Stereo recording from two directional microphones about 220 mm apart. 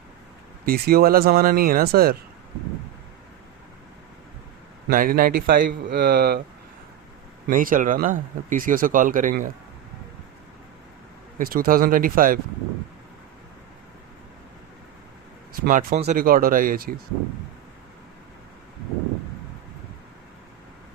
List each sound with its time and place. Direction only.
0.6 s speech: 45° right (ahead or behind)
4.9 s speech: 40° right (ahead or behind)
7.4 s speech: 40° right (ahead or behind)
11.3 s speech: 40° right (ahead or behind)
15.5 s speech: 40° right (ahead or behind)